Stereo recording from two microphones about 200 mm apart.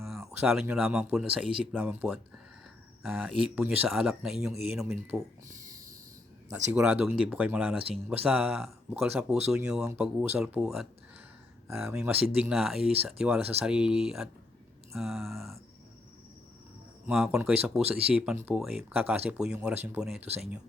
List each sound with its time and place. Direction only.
0.2 s a sound: 15° right (ahead or behind)
0.4 s speech: 5° right (ahead or behind)
5.5 s a sound: 40° right (ahead or behind)
6.7 s speech: 5° right (ahead or behind)
11.9 s speech: 5° right (ahead or behind)
17.1 s speech: 5° right (ahead or behind)